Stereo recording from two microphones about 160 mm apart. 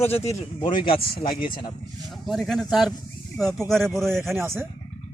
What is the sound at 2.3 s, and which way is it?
A man's voice, centre (ahead or behind).